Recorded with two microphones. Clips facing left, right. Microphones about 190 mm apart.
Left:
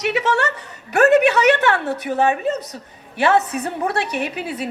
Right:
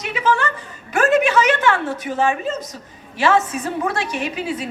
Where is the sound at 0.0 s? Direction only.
75° left (ahead or behind).